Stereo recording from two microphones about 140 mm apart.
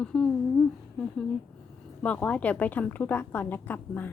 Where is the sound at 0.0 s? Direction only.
10° left (ahead or behind).